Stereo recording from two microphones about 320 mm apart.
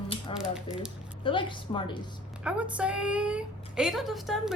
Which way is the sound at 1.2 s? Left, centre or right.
Centre.